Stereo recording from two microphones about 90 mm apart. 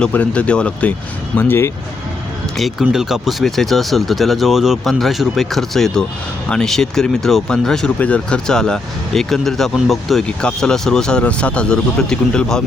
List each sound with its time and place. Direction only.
0.1 s speech: 15° left (ahead or behind)
1.4 s speech: 25° left (ahead or behind)
2.6 s speech: centre (ahead or behind)